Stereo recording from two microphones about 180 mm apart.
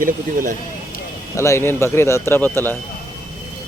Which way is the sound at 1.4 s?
15° left (ahead or behind).